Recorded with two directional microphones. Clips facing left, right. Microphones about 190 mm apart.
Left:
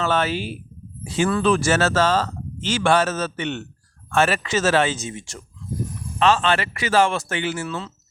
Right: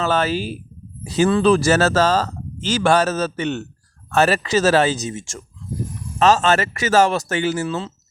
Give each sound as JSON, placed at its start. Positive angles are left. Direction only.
{"t": 0.0, "sound": "a man's voice", "side_deg": -40}
{"t": 7.7, "sound": "speech", "side_deg": -25}